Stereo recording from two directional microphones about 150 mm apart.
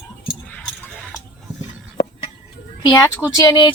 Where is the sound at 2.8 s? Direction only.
25° left (ahead or behind).